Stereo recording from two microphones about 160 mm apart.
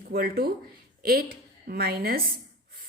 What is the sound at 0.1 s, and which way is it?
Speech, 70° right (ahead or behind).